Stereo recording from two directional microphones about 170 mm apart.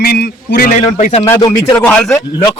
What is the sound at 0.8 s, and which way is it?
Speech, 35° left (ahead or behind).